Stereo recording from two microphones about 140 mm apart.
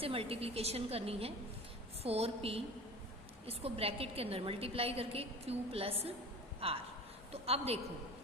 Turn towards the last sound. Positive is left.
turn(degrees=-45)  # may be behind; listen again after turning